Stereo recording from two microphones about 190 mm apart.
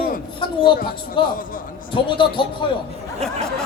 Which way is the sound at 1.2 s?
25° left (ahead or behind).